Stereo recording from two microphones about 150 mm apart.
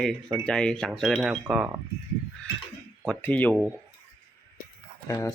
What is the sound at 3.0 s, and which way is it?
Speech, 10° left (ahead or behind).